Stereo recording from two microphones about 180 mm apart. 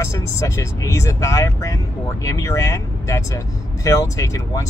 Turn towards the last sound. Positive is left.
turn(degrees=15)  # may be behind; listen again after turning